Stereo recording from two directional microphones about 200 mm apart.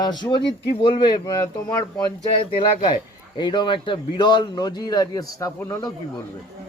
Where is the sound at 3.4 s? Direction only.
25° left (ahead or behind).